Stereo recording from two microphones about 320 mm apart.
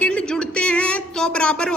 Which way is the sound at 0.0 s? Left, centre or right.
Centre.